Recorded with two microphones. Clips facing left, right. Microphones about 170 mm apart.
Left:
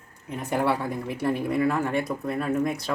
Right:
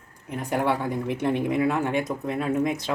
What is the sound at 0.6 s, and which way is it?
Speech, 10° left (ahead or behind).